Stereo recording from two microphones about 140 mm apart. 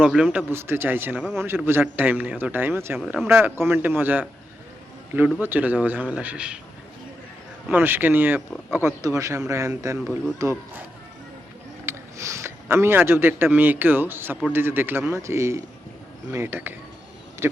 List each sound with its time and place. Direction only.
0.0 s speech: 5° right (ahead or behind)
0.5 s a man's voice: 15° right (ahead or behind)
5.4 s a man's voice: 15° right (ahead or behind)
7.7 s a man's voice: 15° right (ahead or behind)
11.9 s a man's voice: 20° right (ahead or behind)